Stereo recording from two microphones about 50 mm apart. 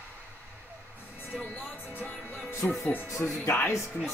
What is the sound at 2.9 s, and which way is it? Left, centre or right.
Speech, left.